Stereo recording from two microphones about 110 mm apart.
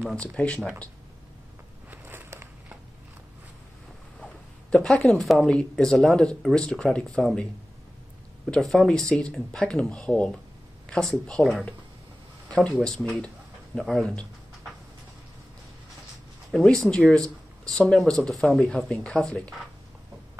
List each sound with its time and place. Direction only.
0.0 s speech: 10° left (ahead or behind)
1.9 s a sound: 20° right (ahead or behind)
4.2 s speech: 5° left (ahead or behind)
8.5 s speech: 5° left (ahead or behind)
12.4 s a sound: 10° left (ahead or behind)
12.8 s speech: 5° left (ahead or behind)
16.5 s speech: centre (ahead or behind)